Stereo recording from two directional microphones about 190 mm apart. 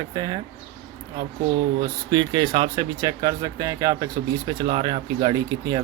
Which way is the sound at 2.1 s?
25° right (ahead or behind).